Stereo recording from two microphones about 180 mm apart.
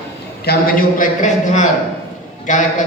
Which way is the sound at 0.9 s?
45° left (ahead or behind).